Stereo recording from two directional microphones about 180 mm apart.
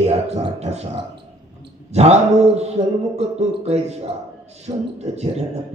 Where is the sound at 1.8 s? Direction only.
35° right (ahead or behind).